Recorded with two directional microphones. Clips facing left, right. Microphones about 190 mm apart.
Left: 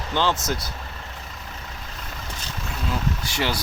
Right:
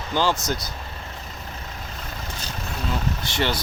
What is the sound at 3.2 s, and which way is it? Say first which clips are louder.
Speech: right 4 dB; 10° left (ahead or behind).